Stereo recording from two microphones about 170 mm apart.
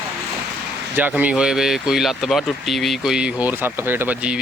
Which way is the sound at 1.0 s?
10° right (ahead or behind).